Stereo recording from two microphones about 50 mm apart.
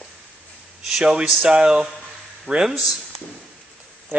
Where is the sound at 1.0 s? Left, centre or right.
Centre.